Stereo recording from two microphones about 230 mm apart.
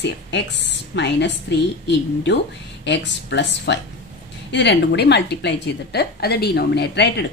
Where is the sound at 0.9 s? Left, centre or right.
Left.